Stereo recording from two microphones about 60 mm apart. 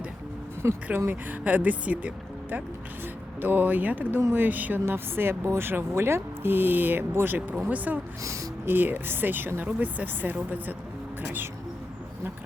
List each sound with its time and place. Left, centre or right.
0.9 s speech: right